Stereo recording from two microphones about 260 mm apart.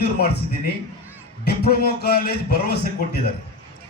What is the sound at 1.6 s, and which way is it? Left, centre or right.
A man's voice, left.